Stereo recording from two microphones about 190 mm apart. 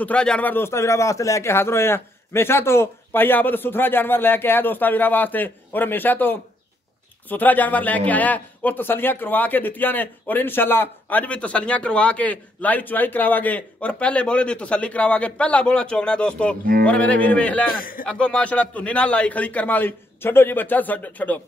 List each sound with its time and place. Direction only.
0.0 s a man's voice: 5° left (ahead or behind)
17.6 s a man's voice: 50° left (ahead or behind)
18.0 s a man's voice: 5° left (ahead or behind)